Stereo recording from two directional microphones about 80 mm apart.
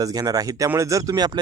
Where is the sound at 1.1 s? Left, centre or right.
Right.